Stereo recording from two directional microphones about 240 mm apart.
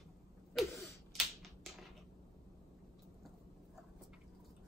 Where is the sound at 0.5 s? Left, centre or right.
Centre.